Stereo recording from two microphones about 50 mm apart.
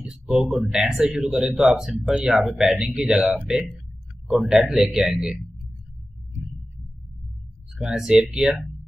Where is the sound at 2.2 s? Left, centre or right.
Centre.